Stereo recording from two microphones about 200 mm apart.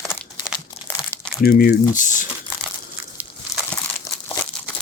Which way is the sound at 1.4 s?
45° left (ahead or behind).